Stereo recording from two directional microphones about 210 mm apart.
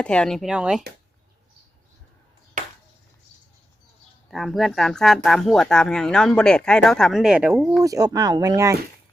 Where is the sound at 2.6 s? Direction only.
35° right (ahead or behind).